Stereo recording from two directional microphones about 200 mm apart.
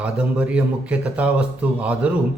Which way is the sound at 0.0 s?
5° right (ahead or behind).